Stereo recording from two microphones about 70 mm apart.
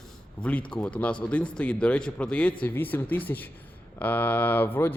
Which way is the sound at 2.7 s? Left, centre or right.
Left.